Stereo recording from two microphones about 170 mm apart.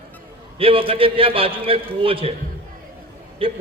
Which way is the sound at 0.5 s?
35° right (ahead or behind).